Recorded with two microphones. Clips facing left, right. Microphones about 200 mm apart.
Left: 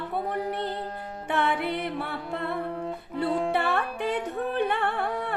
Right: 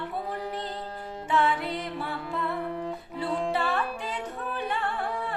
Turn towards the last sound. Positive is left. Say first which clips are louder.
# left 2 dB
turn(degrees=60)  # may be behind; listen again after turning